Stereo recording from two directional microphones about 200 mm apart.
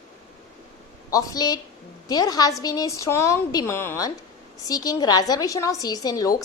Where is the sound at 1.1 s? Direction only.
20° left (ahead or behind).